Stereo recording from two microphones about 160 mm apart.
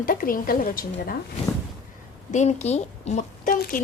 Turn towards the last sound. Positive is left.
turn(degrees=55)  # may be behind; listen again after turning